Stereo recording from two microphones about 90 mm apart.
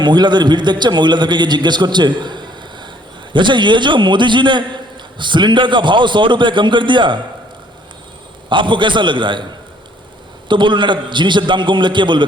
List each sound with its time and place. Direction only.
0.0 s a man's voice: 55° right (ahead or behind)
8.4 s a man's voice: 65° right (ahead or behind)
10.5 s a man's voice: 60° right (ahead or behind)